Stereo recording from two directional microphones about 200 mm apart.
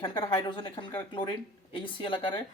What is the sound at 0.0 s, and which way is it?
Speech, 25° left (ahead or behind).